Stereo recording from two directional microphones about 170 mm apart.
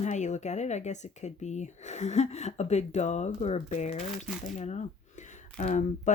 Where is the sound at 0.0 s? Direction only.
45° left (ahead or behind).